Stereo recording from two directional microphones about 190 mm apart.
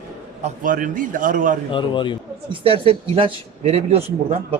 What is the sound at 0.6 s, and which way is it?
Speech, 45° right (ahead or behind).